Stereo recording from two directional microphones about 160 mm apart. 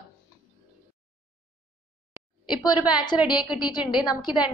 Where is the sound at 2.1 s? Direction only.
25° left (ahead or behind).